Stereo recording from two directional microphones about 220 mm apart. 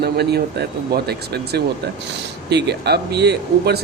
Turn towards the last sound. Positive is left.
turn(degrees=-50)  # may be behind; listen again after turning